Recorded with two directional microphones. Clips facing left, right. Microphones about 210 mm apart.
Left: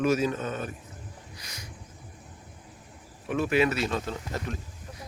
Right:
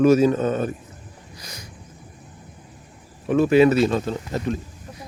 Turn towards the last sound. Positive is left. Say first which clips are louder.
# right 8 dB
turn(degrees=-30)  # may be behind; listen again after turning